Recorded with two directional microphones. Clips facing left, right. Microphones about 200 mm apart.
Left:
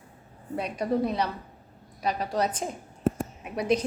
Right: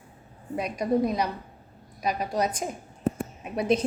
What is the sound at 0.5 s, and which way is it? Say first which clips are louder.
A woman's voice: right 2 dB; 10° right (ahead or behind).